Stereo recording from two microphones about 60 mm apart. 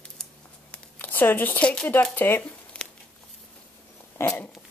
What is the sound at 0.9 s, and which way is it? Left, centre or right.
Speech, left.